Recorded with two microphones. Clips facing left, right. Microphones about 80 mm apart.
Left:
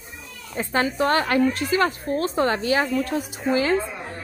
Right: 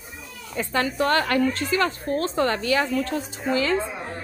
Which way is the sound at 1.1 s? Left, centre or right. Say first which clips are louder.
Left 1 dB; left.